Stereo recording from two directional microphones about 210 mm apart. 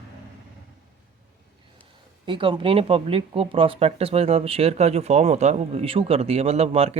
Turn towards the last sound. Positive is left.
turn(degrees=-30)  # may be behind; listen again after turning